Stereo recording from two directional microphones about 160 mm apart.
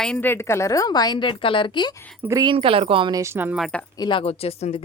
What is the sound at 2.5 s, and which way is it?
Speech, 35° right (ahead or behind).